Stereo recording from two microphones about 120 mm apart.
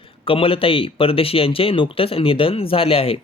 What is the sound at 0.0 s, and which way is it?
Speech, 50° left (ahead or behind).